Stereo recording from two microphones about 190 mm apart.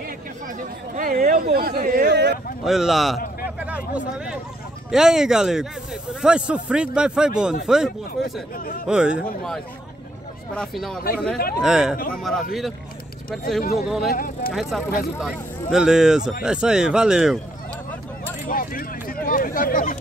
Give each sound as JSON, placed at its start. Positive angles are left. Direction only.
{"t": 0.9, "sound": "speech", "side_deg": -45}
{"t": 2.6, "sound": "a man's voice", "side_deg": 0}
{"t": 3.6, "sound": "a sound", "side_deg": -5}
{"t": 4.9, "sound": "a man's voice", "side_deg": -5}
{"t": 8.2, "sound": "speech", "side_deg": 50}
{"t": 8.8, "sound": "a man's voice", "side_deg": -5}
{"t": 10.5, "sound": "a man's voice", "side_deg": 0}
{"t": 11.3, "sound": "speech", "side_deg": 50}
{"t": 11.6, "sound": "a man's voice", "side_deg": -5}
{"t": 13.8, "sound": "a man's voice", "side_deg": 0}
{"t": 14.1, "sound": "speech", "side_deg": 50}
{"t": 14.5, "sound": "a man's voice", "side_deg": 0}
{"t": 18.5, "sound": "speech", "side_deg": 50}